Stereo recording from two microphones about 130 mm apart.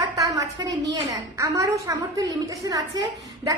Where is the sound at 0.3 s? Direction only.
30° right (ahead or behind).